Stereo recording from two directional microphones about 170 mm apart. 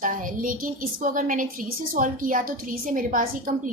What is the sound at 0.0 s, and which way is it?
A woman's voice, 50° right (ahead or behind).